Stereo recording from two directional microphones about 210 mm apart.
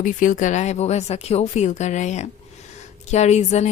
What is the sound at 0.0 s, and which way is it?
A woman's voice, 40° left (ahead or behind).